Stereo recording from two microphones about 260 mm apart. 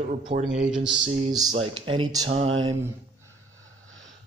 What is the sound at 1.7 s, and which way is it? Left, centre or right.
Speech, centre.